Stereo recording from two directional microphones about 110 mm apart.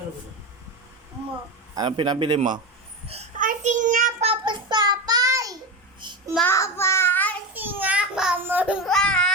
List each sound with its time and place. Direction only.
1.7 s a man's voice: 40° right (ahead or behind)
3.1 s child singing: 80° right
4.4 s child singing: 40° right (ahead or behind)
6.0 s child singing: 45° right (ahead or behind)
6.4 s child singing: 25° left (ahead or behind)
7.5 s a sound: 15° right (ahead or behind)
8.9 s a sound: 5° left (ahead or behind)